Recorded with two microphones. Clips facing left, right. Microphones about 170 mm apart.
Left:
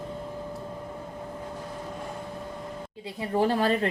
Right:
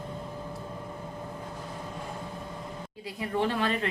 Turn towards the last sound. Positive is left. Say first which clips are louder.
# left 4 dB
turn(degrees=40)  # may be behind; listen again after turning